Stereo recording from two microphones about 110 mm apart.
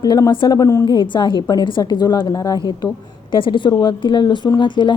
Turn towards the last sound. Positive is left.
turn(degrees=45)  # may be behind; listen again after turning